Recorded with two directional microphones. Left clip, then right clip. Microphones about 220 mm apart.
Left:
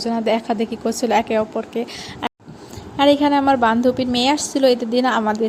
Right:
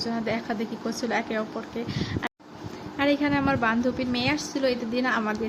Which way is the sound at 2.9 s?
25° left (ahead or behind).